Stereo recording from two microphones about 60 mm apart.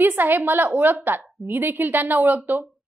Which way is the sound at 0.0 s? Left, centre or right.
Right.